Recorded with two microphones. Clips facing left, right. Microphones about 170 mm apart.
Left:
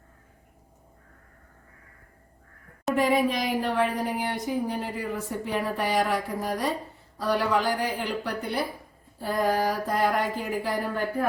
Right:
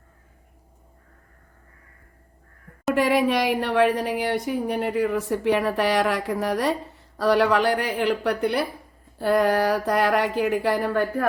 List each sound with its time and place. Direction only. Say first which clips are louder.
2.9 s a woman's voice: right 3 dB; 75° right (ahead or behind)